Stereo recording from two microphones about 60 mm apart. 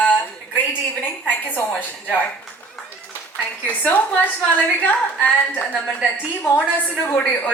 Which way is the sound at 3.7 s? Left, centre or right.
Left.